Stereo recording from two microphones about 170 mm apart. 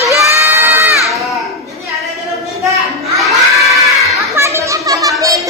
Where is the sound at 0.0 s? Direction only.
15° right (ahead or behind).